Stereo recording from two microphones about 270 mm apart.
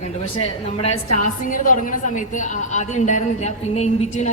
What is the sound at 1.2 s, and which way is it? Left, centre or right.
A woman's voice, left.